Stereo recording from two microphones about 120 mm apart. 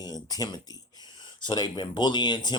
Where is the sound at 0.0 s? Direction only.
35° left (ahead or behind).